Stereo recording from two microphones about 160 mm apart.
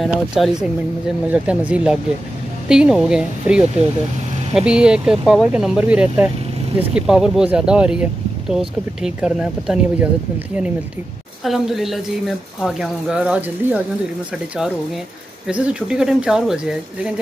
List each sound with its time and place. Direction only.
0.0 s speech: centre (ahead or behind)
11.4 s speech: centre (ahead or behind)
15.4 s speech: 5° right (ahead or behind)